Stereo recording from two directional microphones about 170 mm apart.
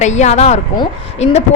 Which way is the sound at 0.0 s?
45° left (ahead or behind).